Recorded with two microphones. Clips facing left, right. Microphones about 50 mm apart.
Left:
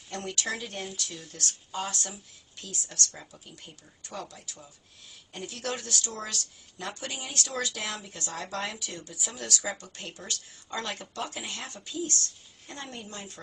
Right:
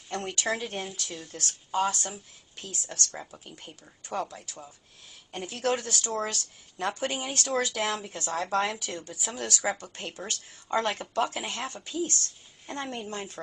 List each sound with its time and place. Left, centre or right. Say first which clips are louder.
0.1 s speech: right 3 dB; right